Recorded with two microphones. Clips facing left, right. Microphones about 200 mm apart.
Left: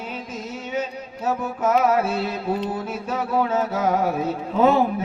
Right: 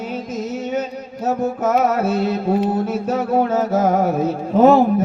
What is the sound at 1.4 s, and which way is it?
Music, 40° right (ahead or behind).